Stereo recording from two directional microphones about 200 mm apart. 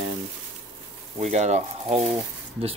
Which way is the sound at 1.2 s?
35° right (ahead or behind).